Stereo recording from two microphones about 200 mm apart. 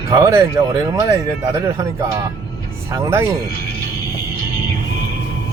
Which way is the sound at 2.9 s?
15° right (ahead or behind).